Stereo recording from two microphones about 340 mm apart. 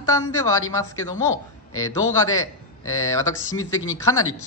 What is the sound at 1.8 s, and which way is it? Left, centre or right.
Speech, centre.